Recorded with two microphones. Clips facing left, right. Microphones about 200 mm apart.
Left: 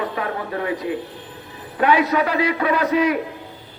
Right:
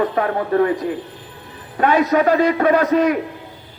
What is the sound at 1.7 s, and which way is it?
Speech, 45° right (ahead or behind).